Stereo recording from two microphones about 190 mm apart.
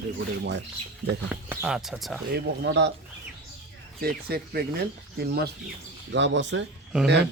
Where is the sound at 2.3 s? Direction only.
65° right (ahead or behind).